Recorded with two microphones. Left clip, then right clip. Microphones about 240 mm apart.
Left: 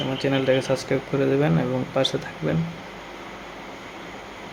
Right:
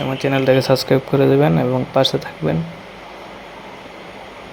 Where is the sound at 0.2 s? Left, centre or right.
Centre.